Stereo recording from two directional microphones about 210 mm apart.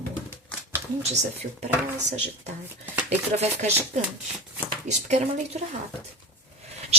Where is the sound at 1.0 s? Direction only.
30° right (ahead or behind).